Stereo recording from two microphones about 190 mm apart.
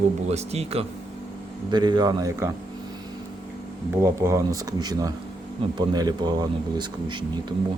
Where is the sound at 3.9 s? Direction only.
15° right (ahead or behind).